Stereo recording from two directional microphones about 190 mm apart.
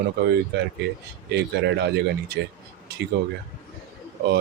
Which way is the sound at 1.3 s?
65° right (ahead or behind).